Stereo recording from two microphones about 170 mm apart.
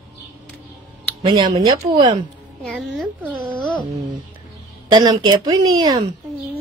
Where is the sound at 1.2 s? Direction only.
30° right (ahead or behind).